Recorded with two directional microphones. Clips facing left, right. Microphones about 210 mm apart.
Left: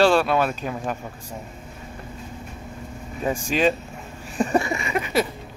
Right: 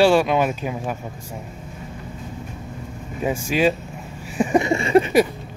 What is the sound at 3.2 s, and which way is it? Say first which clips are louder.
Speech: right 2 dB; 10° right (ahead or behind).